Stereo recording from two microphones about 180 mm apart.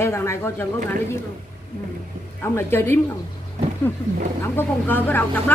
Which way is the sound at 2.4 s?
10° left (ahead or behind).